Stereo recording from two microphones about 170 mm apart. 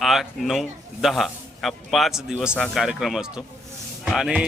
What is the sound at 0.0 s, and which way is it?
A man's voice, centre (ahead or behind).